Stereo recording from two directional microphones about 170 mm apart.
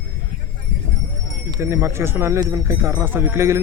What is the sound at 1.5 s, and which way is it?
Speech, 15° right (ahead or behind).